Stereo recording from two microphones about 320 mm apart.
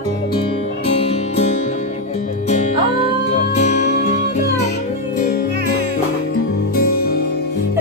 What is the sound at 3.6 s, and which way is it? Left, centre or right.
Music, left.